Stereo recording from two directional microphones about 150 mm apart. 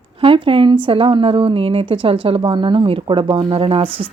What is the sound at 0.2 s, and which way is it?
A woman's voice, 35° right (ahead or behind).